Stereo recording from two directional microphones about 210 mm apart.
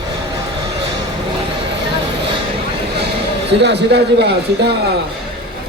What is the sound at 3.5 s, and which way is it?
A man's voice, 55° right (ahead or behind).